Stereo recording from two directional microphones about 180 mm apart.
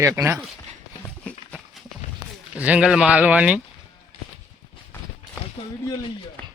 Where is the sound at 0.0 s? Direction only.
15° right (ahead or behind).